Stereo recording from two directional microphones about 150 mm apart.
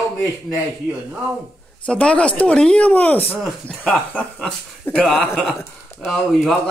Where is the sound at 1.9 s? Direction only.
5° left (ahead or behind).